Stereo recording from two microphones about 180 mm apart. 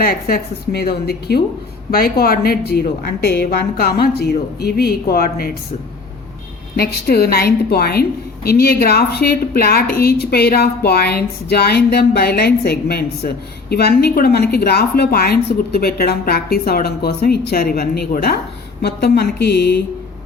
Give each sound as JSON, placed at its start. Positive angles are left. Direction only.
{"t": 0.3, "sound": "a woman's voice", "side_deg": 60}
{"t": 6.7, "sound": "a woman's voice", "side_deg": 60}